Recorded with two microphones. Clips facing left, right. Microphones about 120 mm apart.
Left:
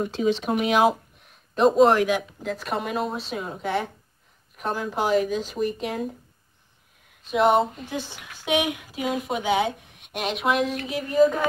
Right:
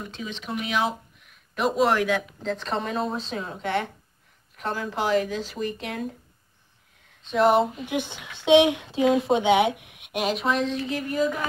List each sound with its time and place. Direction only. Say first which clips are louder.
0.0 s speech: left 12 dB; 40° left (ahead or behind)
1.8 s speech: left 1 dB; 20° left (ahead or behind)
7.2 s speech: even; centre (ahead or behind)
7.8 s speech: right 3 dB; 20° right (ahead or behind)
10.2 s speech: left 1 dB; centre (ahead or behind)
10.9 s a sound: left 5 dB; 20° left (ahead or behind)